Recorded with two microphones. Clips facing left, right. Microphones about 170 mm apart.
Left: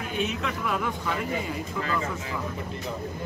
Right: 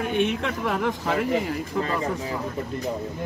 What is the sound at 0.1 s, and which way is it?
Speech, 60° right (ahead or behind).